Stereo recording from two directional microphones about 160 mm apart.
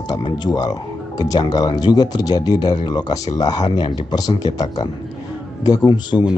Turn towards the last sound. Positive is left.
turn(degrees=25)  # may be behind; listen again after turning